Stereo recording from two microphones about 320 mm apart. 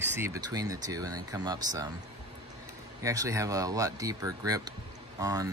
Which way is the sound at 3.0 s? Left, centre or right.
Centre.